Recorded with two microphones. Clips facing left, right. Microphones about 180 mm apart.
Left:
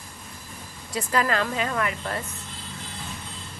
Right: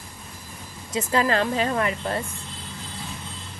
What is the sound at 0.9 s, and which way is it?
A woman's voice, 25° right (ahead or behind).